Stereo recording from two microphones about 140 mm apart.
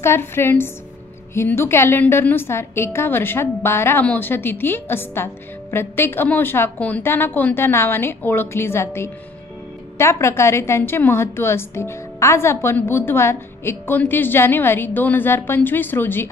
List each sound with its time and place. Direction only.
0.0 s a woman's voice: 15° left (ahead or behind)